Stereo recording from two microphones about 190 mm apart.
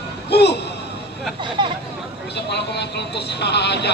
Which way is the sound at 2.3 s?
65° left (ahead or behind).